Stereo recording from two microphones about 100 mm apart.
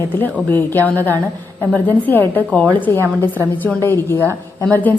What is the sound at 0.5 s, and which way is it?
A woman's voice, 20° left (ahead or behind).